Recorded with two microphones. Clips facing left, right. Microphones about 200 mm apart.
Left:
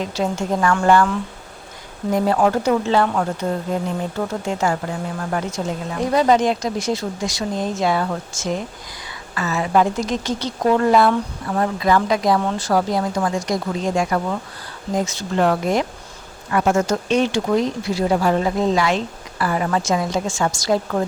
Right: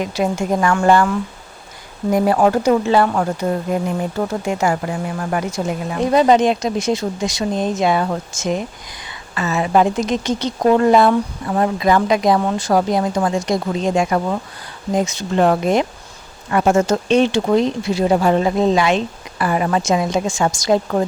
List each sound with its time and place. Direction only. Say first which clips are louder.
0.0 s speech: right 3 dB; 10° right (ahead or behind)
6.0 s a woman's voice: right 3 dB; 20° right (ahead or behind)